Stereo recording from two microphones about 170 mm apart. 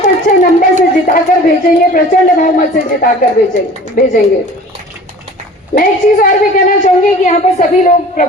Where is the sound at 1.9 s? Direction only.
55° left (ahead or behind).